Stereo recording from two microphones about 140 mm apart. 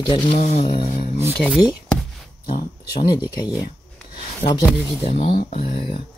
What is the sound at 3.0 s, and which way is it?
Speech, 30° left (ahead or behind).